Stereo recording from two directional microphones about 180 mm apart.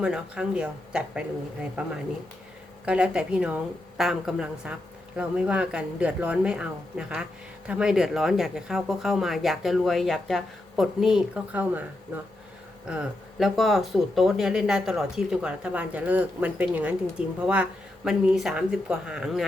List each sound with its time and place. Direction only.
0.0 s speech: 5° right (ahead or behind)
12.9 s speech: 5° right (ahead or behind)